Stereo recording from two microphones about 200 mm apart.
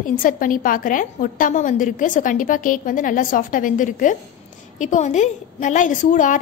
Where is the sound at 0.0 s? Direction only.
45° left (ahead or behind).